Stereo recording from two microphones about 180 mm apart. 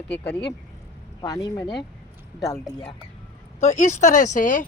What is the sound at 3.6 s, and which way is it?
Speech, 40° left (ahead or behind).